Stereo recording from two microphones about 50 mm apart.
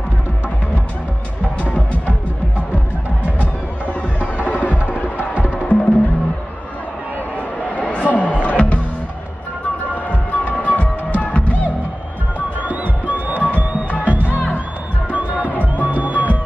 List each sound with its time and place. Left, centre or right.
1.4 s music: left
3.8 s music: right
5.6 s music: left
7.7 s music: left
9.8 s music: left
12.4 s music: right